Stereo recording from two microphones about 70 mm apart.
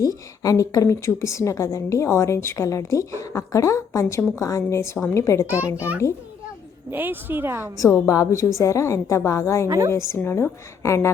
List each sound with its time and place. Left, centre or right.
0.0 s a woman's voice: left
6.0 s a child's voice: left
6.9 s speech: right
8.0 s a woman's voice: left
9.6 s a woman's voice: right
9.9 s a woman's voice: left